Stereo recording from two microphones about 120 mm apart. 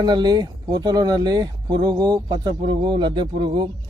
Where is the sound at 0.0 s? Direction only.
35° right (ahead or behind).